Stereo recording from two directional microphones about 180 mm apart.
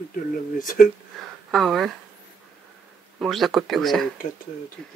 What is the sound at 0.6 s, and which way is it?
Speech, 50° left (ahead or behind).